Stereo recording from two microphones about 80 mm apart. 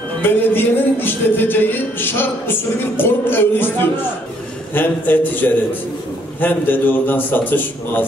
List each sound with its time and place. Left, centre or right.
0.2 s music: left